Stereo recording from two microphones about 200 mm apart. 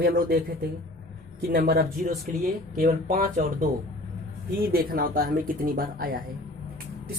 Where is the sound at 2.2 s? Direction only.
40° right (ahead or behind).